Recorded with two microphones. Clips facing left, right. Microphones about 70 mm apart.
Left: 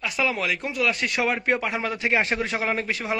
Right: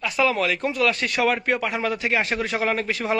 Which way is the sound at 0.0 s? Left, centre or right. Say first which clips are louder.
Right 4 dB; centre.